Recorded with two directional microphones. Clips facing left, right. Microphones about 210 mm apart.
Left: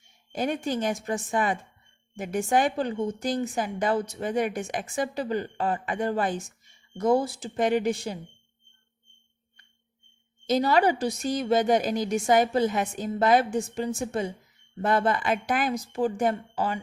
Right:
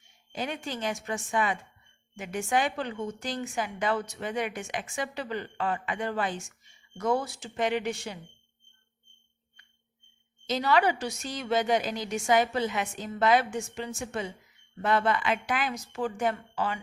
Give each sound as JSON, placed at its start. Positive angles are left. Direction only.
{"t": 0.3, "sound": "a woman's voice", "side_deg": 45}
{"t": 10.5, "sound": "a woman's voice", "side_deg": 40}